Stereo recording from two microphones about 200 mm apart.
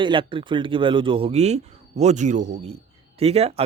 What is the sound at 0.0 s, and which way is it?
Speech, 25° right (ahead or behind).